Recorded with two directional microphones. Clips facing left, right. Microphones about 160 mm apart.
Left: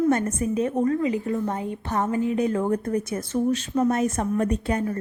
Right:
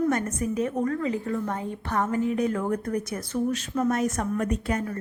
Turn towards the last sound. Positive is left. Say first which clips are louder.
# left 3 dB
turn(degrees=30)  # may be behind; listen again after turning